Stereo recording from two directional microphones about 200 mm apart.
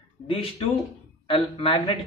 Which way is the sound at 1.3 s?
25° left (ahead or behind).